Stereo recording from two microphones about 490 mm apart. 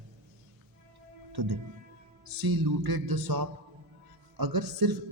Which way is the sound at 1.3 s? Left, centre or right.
Right.